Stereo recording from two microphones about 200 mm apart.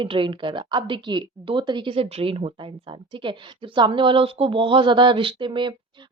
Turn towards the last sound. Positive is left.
turn(degrees=-25)  # may be behind; listen again after turning